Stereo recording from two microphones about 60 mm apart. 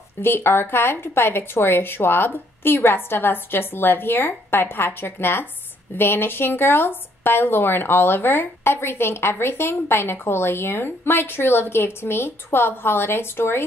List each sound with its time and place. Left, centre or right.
0.2 s speech: left